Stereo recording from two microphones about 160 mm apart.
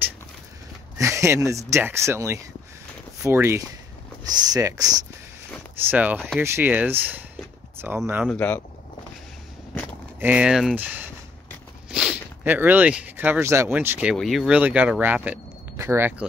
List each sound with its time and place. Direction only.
0.9 s speech: 20° right (ahead or behind)
5.9 s speech: 10° right (ahead or behind)
8.3 s speech: 10° left (ahead or behind)
10.2 s speech: 5° right (ahead or behind)
14.1 s speech: centre (ahead or behind)